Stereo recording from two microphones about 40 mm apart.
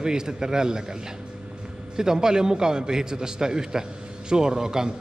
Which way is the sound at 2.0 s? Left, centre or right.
Centre.